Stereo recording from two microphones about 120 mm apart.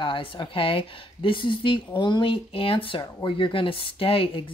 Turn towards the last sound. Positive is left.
turn(degrees=50)  # may be behind; listen again after turning